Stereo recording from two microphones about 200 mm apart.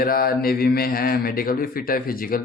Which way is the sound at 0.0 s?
45° left (ahead or behind).